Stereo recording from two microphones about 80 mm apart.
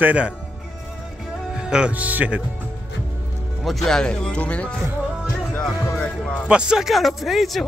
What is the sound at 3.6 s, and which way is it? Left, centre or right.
Speech, centre.